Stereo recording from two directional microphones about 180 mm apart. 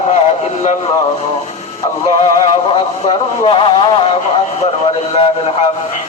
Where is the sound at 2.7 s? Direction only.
30° left (ahead or behind).